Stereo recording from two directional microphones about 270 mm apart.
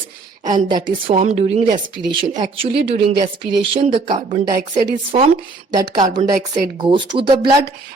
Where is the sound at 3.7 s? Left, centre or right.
Right.